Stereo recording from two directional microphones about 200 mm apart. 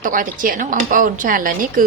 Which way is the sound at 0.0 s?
45° right (ahead or behind).